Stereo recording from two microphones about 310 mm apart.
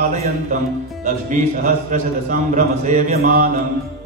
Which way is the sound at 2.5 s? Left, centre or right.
Right.